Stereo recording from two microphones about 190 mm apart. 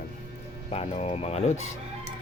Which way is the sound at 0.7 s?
35° left (ahead or behind).